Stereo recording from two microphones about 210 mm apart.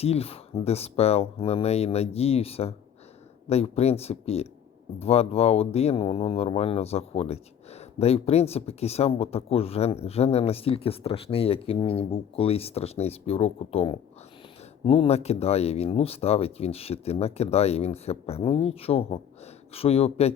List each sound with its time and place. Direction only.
0.0 s speech: 30° left (ahead or behind)